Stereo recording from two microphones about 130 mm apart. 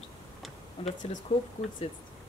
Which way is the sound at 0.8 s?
40° left (ahead or behind).